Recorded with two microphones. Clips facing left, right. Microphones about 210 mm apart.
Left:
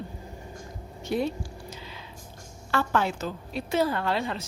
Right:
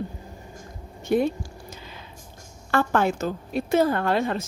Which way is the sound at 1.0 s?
50° right (ahead or behind).